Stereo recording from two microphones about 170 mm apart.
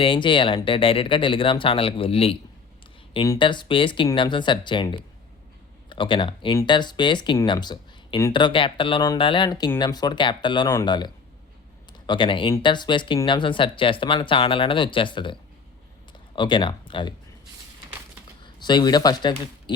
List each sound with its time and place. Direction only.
0.0 s speech: 30° left (ahead or behind)
18.4 s speech: 25° left (ahead or behind)